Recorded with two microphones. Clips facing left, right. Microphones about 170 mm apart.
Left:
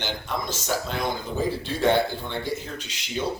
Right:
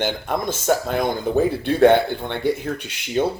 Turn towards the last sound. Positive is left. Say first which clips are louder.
# right 8 dB
turn(degrees=-60)  # may be behind; listen again after turning